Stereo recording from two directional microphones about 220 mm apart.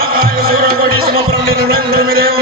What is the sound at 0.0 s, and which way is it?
Music, 45° right (ahead or behind).